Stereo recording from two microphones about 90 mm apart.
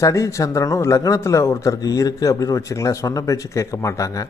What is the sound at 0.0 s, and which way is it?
Speech, 35° left (ahead or behind).